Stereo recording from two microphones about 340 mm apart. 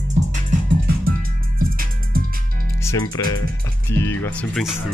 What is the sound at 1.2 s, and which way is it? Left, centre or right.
Music, right.